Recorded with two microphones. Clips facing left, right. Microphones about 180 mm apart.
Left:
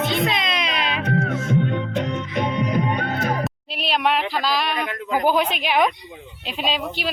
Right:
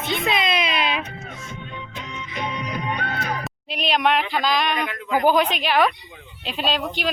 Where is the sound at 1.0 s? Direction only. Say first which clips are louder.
Left 14 dB; 75° left (ahead or behind).